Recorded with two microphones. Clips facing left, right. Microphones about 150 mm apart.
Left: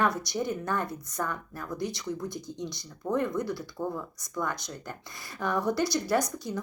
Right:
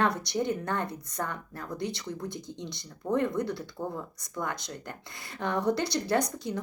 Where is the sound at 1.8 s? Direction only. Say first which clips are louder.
Even; 60° right (ahead or behind).